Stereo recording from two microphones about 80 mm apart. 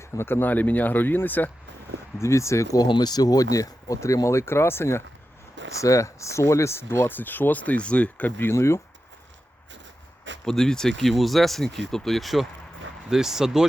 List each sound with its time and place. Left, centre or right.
0.0 s speech: left
2.1 s speech: left
2.8 s speech: left
8.5 s speech: left
10.4 s speech: centre